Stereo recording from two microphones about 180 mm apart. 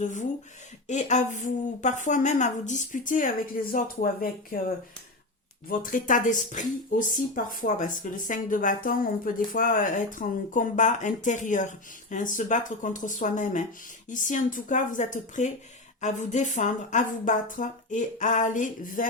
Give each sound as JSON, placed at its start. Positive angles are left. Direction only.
{"t": 0.0, "sound": "speech", "side_deg": 45}
{"t": 5.6, "sound": "speech", "side_deg": 50}